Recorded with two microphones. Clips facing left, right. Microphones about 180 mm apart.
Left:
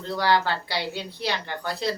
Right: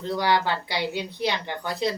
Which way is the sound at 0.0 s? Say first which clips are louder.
Even; 15° right (ahead or behind).